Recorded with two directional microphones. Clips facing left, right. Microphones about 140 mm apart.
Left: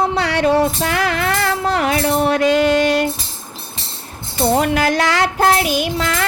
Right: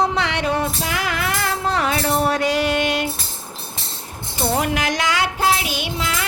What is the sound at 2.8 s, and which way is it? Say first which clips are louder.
Music: left 6 dB; 45° left (ahead or behind).